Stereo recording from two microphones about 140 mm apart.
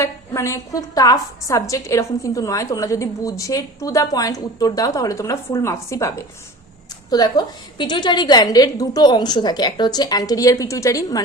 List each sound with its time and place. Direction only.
0.0 s a woman's voice: 20° left (ahead or behind)